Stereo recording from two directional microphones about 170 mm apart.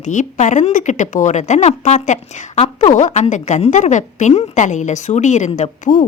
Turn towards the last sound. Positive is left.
turn(degrees=45)  # may be behind; listen again after turning